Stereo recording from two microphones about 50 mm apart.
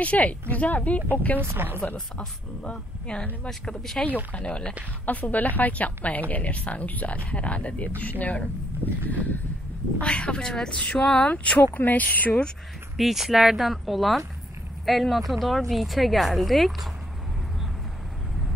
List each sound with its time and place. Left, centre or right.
0.0 s a woman's voice: left
1.4 s speech: right
2.1 s speech: left
3.4 s speech: centre
4.3 s a woman's voice: left
12.9 s speech: centre